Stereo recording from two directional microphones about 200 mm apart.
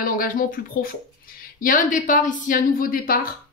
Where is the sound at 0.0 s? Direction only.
45° left (ahead or behind).